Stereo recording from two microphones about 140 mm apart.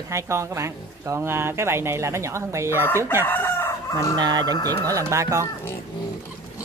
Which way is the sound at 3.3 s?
15° left (ahead or behind).